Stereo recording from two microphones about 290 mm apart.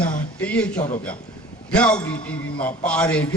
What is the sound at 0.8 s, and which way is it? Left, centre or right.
Speech, left.